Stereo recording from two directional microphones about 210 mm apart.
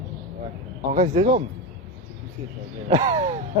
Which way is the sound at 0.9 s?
40° right (ahead or behind).